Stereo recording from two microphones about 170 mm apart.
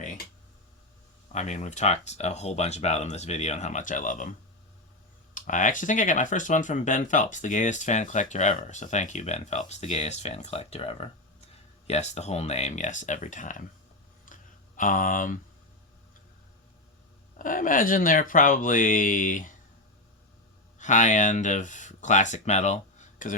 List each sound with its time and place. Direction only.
1.3 s speech: 40° left (ahead or behind)
14.3 s a sound: 50° left (ahead or behind)
14.8 s speech: 50° left (ahead or behind)
17.3 s speech: 50° left (ahead or behind)
20.7 s speech: 45° left (ahead or behind)